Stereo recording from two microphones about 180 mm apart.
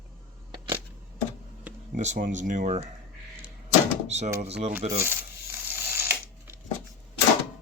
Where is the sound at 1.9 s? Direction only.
40° right (ahead or behind).